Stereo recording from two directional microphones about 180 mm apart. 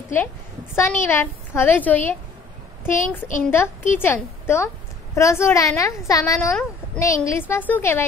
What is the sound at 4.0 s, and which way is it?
A woman's voice, 15° left (ahead or behind).